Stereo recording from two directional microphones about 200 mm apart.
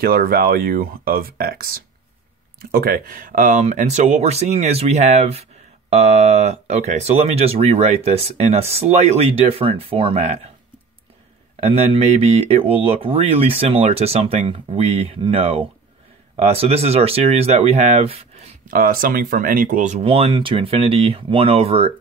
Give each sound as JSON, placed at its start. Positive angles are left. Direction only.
{"t": 0.0, "sound": "speech", "side_deg": -50}
{"t": 11.6, "sound": "speech", "side_deg": -30}
{"t": 18.7, "sound": "speech", "side_deg": -45}